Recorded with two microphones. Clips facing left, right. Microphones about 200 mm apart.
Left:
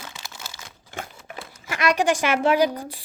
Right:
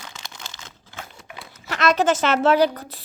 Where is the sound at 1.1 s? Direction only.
10° left (ahead or behind).